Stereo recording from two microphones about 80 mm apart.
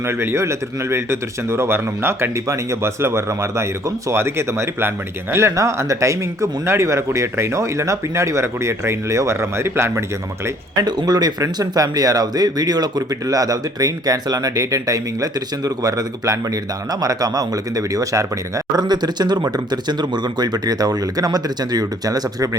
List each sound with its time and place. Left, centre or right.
0.0 s a man's voice: right
10.8 s speech: right
18.8 s speech: right